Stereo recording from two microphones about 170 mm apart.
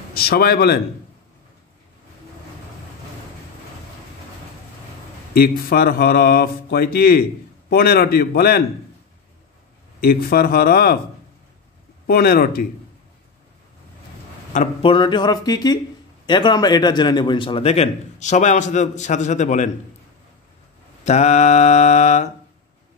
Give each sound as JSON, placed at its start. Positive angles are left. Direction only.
{"t": 0.1, "sound": "speech", "side_deg": 65}
{"t": 5.3, "sound": "speech", "side_deg": 65}
{"t": 9.9, "sound": "speech", "side_deg": 65}
{"t": 12.1, "sound": "speech", "side_deg": 65}
{"t": 14.5, "sound": "speech", "side_deg": 45}
{"t": 14.9, "sound": "a man's voice", "side_deg": 25}
{"t": 21.0, "sound": "mantra", "side_deg": 40}